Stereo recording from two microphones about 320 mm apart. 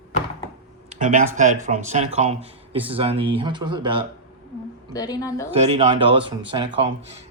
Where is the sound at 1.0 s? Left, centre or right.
Right.